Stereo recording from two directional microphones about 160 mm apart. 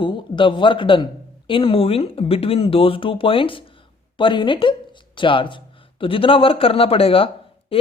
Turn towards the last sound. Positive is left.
turn(degrees=35)  # may be behind; listen again after turning